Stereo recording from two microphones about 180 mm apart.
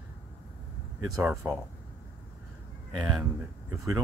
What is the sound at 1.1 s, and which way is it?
Speech, 15° right (ahead or behind).